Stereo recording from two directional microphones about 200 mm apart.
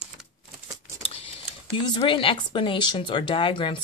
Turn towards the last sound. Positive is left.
turn(degrees=25)  # may be behind; listen again after turning